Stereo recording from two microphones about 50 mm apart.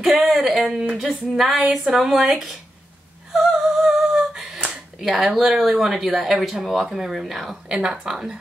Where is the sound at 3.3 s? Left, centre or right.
Centre.